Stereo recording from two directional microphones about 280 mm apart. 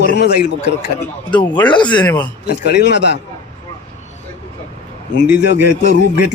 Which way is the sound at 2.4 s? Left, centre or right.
Left.